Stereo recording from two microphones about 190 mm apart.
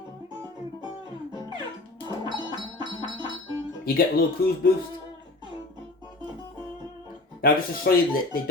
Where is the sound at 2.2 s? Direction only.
25° right (ahead or behind).